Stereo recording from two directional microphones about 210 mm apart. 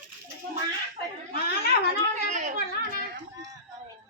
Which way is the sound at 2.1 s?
35° right (ahead or behind).